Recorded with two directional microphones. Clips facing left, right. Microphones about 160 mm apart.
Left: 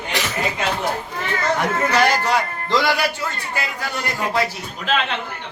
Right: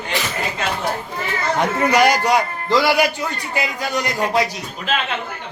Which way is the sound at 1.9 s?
15° right (ahead or behind).